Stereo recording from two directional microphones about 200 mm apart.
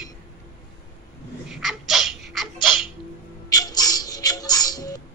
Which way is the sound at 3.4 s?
20° left (ahead or behind).